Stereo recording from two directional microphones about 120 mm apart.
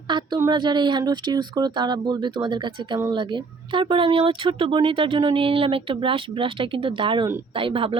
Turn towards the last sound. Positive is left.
turn(degrees=-50)  # may be behind; listen again after turning